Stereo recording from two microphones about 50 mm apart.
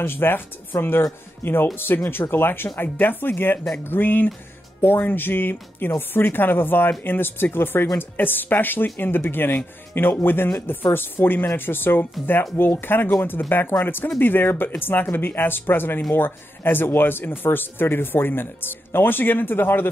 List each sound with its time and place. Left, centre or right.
0.0 s speech: left